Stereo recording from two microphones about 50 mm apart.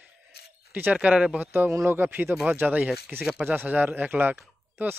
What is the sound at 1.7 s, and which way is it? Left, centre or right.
Speech, right.